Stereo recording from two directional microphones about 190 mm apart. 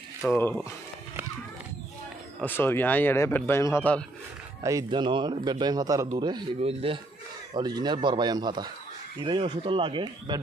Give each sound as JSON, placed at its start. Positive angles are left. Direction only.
{"t": 0.3, "sound": "speech", "side_deg": 10}
{"t": 2.4, "sound": "speech", "side_deg": 10}
{"t": 4.6, "sound": "a man's voice", "side_deg": -20}